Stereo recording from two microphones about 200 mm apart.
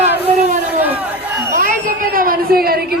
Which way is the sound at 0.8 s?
10° right (ahead or behind).